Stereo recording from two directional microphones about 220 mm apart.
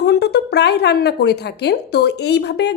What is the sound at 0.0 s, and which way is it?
A woman's voice, 45° left (ahead or behind).